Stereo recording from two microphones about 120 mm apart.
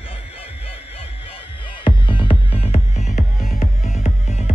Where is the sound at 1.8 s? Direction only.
45° left (ahead or behind).